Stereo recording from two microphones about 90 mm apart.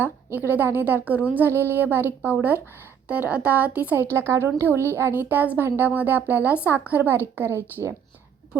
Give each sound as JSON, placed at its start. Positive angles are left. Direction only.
{"t": 0.0, "sound": "a woman's voice", "side_deg": -20}
{"t": 4.0, "sound": "a woman's voice", "side_deg": -30}